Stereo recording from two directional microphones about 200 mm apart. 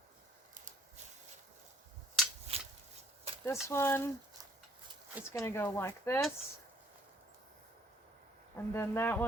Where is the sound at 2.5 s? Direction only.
30° right (ahead or behind).